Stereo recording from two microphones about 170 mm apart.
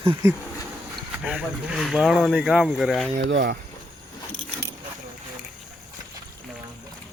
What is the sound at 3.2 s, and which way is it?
Speech, 90° right.